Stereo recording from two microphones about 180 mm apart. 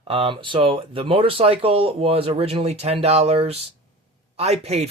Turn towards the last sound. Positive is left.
turn(degrees=-35)  # may be behind; listen again after turning